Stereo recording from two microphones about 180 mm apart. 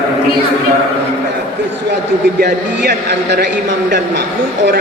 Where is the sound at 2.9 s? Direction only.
70° right (ahead or behind).